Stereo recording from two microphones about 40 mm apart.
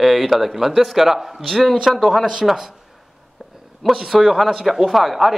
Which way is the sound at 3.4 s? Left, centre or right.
Centre.